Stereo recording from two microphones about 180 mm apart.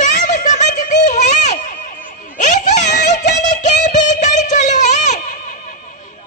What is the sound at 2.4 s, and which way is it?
Music, 45° left (ahead or behind).